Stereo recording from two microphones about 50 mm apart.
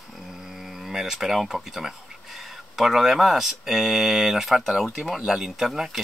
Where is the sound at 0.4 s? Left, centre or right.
Centre.